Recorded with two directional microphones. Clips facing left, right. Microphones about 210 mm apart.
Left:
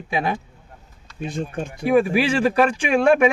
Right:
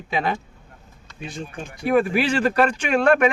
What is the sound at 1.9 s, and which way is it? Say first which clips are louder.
A man's voice: left 2 dB; 10° left (ahead or behind).